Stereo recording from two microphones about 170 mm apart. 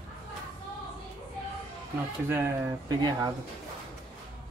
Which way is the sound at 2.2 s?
15° right (ahead or behind).